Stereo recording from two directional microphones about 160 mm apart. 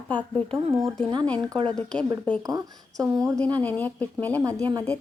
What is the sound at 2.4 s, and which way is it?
Speech, 25° right (ahead or behind).